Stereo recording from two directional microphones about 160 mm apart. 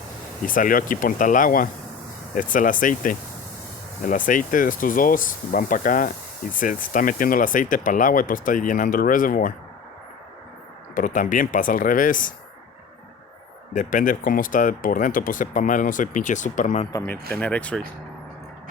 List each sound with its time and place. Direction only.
0.4 s speech: 60° left (ahead or behind)
10.9 s speech: 55° left (ahead or behind)
13.7 s speech: 55° left (ahead or behind)
17.2 s speech: 5° left (ahead or behind)